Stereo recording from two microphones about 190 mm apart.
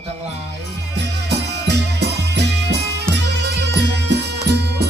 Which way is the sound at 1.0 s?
60° right (ahead or behind).